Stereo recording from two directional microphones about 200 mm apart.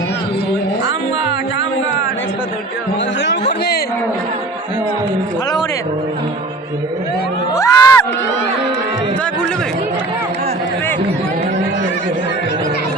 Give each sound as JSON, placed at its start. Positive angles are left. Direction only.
{"t": 7.5, "sound": "crowd", "side_deg": 15}